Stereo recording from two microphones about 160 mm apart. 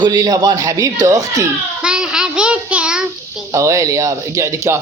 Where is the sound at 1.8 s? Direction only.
5° right (ahead or behind).